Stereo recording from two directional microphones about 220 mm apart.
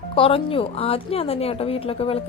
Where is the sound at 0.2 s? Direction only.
25° left (ahead or behind).